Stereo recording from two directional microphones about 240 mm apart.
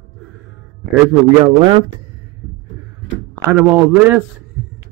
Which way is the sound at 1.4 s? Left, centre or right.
Centre.